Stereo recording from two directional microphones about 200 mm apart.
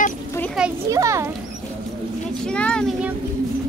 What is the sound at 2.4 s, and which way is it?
Speech, 5° left (ahead or behind).